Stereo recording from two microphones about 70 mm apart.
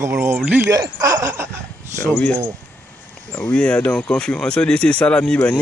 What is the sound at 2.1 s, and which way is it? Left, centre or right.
Speech, left.